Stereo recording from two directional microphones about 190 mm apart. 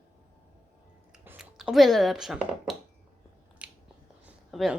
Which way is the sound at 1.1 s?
5° right (ahead or behind).